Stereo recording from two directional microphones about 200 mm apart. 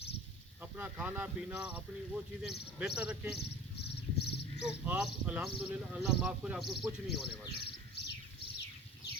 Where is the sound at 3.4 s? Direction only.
55° left (ahead or behind).